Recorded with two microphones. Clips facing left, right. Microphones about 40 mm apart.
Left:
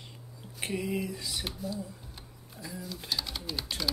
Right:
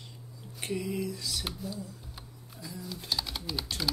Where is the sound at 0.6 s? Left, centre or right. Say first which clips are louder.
Left 1 dB; centre.